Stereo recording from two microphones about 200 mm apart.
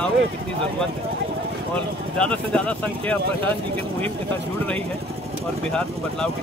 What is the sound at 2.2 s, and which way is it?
Speech, 5° left (ahead or behind).